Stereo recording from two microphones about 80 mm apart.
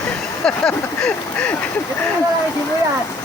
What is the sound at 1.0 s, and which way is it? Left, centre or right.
Speech, centre.